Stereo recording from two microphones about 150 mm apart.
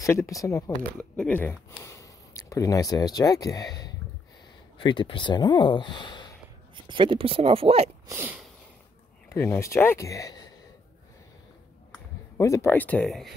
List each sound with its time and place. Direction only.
0.0 s speech: 20° left (ahead or behind)
1.1 s speech: 10° left (ahead or behind)
4.7 s speech: 35° left (ahead or behind)
6.7 s speech: 35° right (ahead or behind)
8.1 s a sound: 15° right (ahead or behind)
9.3 s speech: 15° left (ahead or behind)
12.4 s speech: 20° left (ahead or behind); by 13.3 s centre (ahead or behind)